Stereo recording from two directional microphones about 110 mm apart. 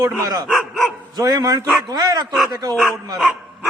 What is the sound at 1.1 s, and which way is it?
Speech, 35° right (ahead or behind).